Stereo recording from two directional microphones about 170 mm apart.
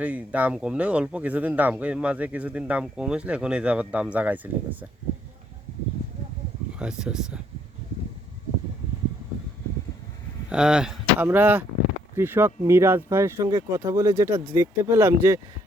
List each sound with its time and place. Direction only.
0.0 s speech: 10° right (ahead or behind)
6.7 s speech: 5° right (ahead or behind)
10.5 s speech: 5° right (ahead or behind)